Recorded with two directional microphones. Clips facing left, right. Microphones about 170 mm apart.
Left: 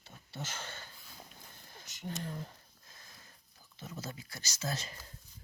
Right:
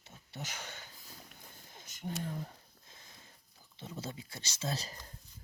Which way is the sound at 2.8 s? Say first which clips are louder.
Even; 25° right (ahead or behind).